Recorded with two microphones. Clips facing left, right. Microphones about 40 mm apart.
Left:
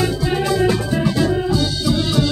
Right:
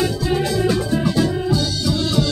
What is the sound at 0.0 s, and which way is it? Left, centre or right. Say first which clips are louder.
Music: left 1 dB; centre.